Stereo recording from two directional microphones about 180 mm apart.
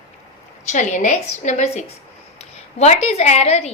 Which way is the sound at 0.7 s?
40° left (ahead or behind).